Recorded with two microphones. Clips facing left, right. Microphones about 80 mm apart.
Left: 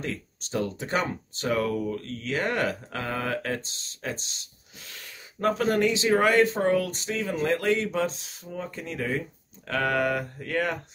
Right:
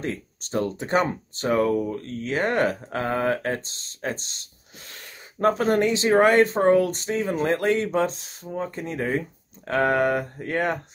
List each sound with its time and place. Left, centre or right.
0.0 s speech: right